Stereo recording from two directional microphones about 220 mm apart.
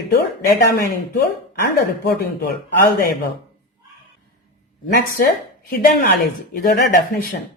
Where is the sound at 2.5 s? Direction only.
45° left (ahead or behind).